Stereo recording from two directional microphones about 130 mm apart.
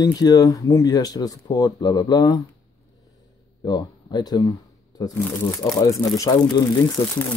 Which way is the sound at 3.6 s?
35° left (ahead or behind).